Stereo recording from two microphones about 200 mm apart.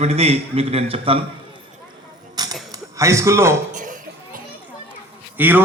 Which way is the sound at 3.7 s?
40° right (ahead or behind).